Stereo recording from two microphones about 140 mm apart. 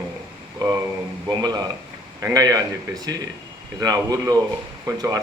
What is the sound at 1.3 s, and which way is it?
Speech, 30° right (ahead or behind).